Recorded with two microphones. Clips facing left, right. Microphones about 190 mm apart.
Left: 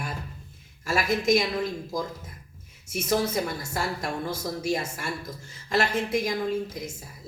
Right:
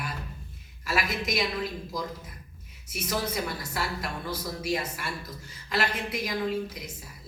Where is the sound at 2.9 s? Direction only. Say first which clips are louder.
Left 6 dB; 45° left (ahead or behind).